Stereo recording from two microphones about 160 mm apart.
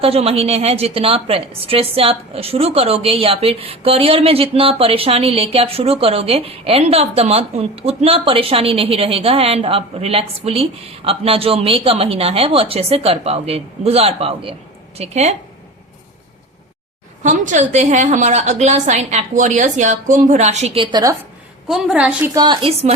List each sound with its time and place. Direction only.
0.0 s a woman's voice: 40° right (ahead or behind)
17.2 s a woman's voice: 50° right (ahead or behind); by 21.2 s 25° right (ahead or behind)
21.7 s a woman's voice: 5° right (ahead or behind)
22.4 s a woman's voice: 25° right (ahead or behind)